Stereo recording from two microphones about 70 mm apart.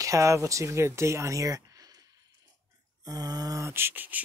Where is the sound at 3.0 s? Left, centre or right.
Right.